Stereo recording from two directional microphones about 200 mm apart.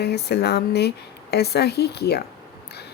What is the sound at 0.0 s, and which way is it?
Speech, 55° left (ahead or behind).